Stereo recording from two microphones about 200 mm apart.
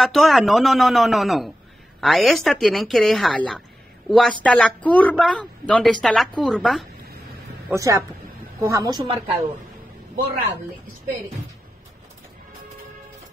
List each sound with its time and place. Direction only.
0.0 s a woman's voice: centre (ahead or behind)
7.7 s a woman's voice: 15° right (ahead or behind)